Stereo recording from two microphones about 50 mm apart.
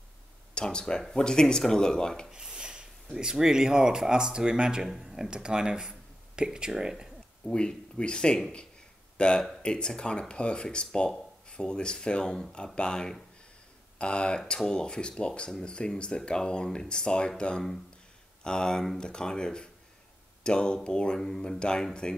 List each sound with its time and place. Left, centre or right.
0.6 s speech: centre
2.3 s speech: centre
4.8 s speech: centre
7.4 s speech: centre